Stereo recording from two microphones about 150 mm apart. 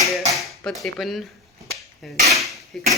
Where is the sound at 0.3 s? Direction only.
Centre (ahead or behind).